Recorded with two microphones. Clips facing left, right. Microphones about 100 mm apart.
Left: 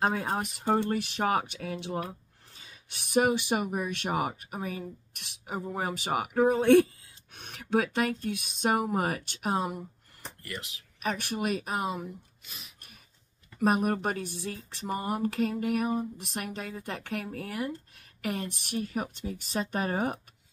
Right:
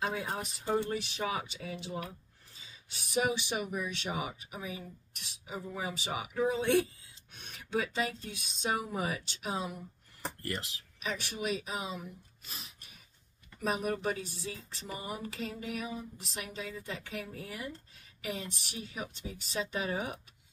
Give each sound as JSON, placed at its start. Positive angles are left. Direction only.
{"t": 0.0, "sound": "speech", "side_deg": 50}
{"t": 10.2, "sound": "speech", "side_deg": -35}
{"t": 11.0, "sound": "speech", "side_deg": 50}
{"t": 12.4, "sound": "gasp", "side_deg": -30}
{"t": 13.6, "sound": "speech", "side_deg": 55}